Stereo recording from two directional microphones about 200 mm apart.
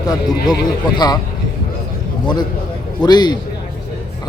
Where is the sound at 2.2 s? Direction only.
20° left (ahead or behind).